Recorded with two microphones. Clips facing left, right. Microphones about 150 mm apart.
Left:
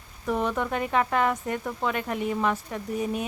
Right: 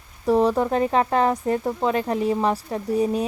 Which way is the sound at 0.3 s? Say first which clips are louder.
Right 8 dB; 35° right (ahead or behind).